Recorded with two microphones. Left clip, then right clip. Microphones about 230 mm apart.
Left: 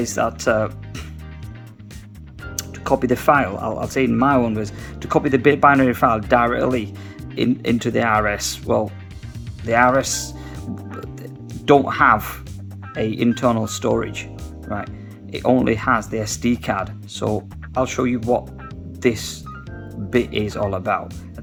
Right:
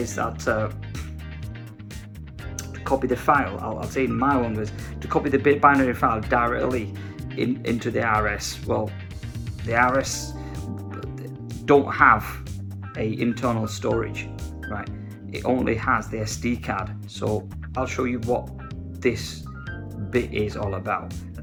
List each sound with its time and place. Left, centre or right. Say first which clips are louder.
0.0 s speech: left 6 dB; left
2.6 s speech: left 4 dB; left
11.6 s speech: left 2 dB; left